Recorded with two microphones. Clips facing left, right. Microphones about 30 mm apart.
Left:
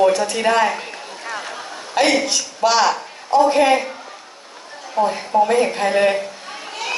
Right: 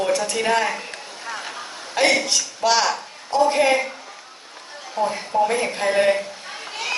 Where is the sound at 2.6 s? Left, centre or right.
Centre.